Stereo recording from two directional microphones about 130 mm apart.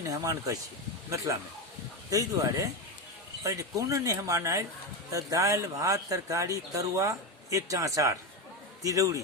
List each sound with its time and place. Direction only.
0.0 s speech: 25° right (ahead or behind)